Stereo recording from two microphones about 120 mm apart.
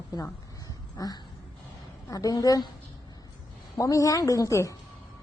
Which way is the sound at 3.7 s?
25° left (ahead or behind).